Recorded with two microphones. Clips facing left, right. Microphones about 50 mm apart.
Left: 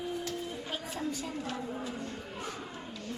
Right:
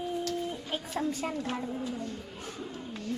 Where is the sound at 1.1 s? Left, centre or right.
Right.